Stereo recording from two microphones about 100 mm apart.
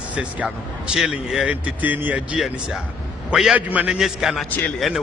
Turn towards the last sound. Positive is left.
turn(degrees=20)  # may be behind; listen again after turning